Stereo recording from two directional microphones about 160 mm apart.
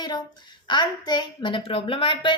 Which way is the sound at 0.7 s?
25° left (ahead or behind).